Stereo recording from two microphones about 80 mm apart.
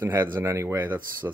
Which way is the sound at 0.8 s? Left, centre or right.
Right.